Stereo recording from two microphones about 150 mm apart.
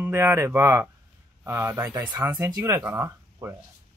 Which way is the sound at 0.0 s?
15° right (ahead or behind).